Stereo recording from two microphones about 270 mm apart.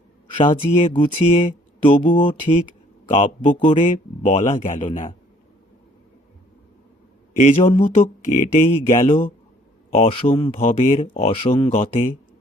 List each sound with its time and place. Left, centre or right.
0.3 s speech: centre
7.3 s speech: left